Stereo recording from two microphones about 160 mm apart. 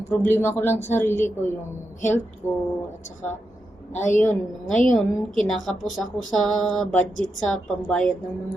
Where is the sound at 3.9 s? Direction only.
50° left (ahead or behind).